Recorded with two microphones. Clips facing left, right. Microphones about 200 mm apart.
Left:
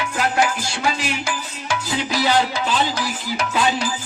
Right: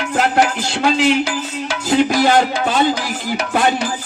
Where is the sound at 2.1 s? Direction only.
50° right (ahead or behind).